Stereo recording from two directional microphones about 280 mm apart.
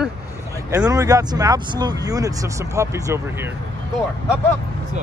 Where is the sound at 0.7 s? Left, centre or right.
Centre.